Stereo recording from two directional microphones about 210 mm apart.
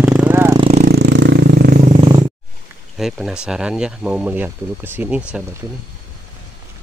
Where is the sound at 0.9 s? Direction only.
55° right (ahead or behind).